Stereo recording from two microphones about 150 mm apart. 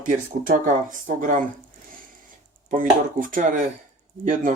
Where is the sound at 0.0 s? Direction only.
60° right (ahead or behind).